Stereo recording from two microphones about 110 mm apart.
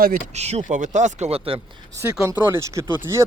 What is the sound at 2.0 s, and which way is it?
Speech, 30° right (ahead or behind).